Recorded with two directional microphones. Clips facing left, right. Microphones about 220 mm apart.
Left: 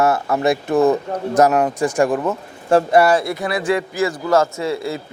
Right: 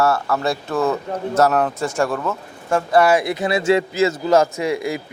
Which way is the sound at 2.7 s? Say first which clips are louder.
Left 6 dB; 30° left (ahead or behind).